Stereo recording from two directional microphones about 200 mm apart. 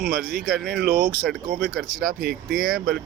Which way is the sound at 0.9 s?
45° right (ahead or behind).